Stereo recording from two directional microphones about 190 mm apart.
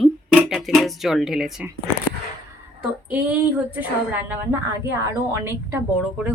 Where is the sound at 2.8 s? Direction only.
10° right (ahead or behind).